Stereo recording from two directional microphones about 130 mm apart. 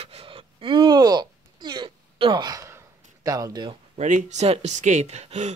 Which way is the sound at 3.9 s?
70° right (ahead or behind).